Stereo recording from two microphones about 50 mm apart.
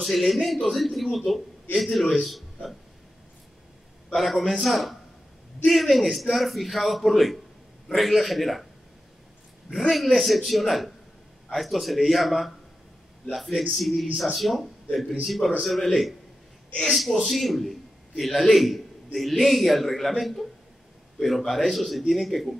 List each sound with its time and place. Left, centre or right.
0.0 s a man's voice: centre
4.1 s a man's voice: centre
9.8 s a man's voice: centre
13.6 s a man's voice: centre